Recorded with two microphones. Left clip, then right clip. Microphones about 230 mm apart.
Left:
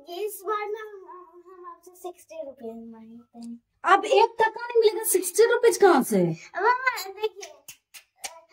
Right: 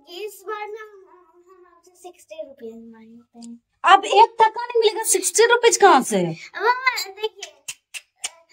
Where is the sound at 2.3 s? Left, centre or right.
Left.